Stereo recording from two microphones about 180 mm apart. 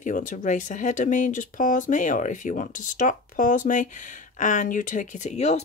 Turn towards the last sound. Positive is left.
turn(degrees=40)  # may be behind; listen again after turning